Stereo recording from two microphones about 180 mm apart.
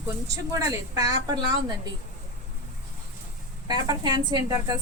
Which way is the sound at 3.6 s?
25° right (ahead or behind).